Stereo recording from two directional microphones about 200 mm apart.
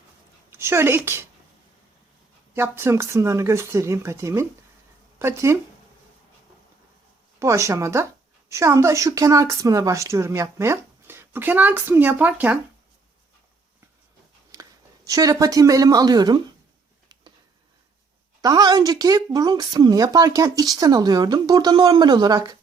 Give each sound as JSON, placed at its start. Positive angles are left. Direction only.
{"t": 0.5, "sound": "a woman's voice", "side_deg": -10}
{"t": 2.6, "sound": "a woman's voice", "side_deg": -10}
{"t": 7.3, "sound": "a woman's voice", "side_deg": -15}
{"t": 14.5, "sound": "speech", "side_deg": -15}
{"t": 18.4, "sound": "speech", "side_deg": -20}